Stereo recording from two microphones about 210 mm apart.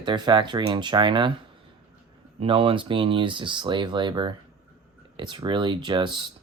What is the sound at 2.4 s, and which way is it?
Speech, 25° right (ahead or behind).